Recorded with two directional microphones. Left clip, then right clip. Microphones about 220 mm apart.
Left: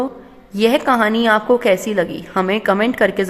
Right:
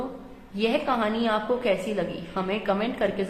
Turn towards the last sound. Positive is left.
turn(degrees=45)  # may be behind; listen again after turning